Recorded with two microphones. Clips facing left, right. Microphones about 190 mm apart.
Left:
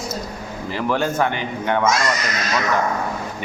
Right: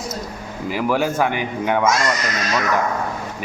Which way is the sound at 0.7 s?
10° right (ahead or behind).